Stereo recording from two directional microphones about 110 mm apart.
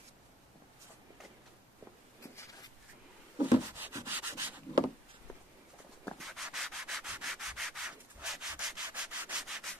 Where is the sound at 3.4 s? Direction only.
15° right (ahead or behind).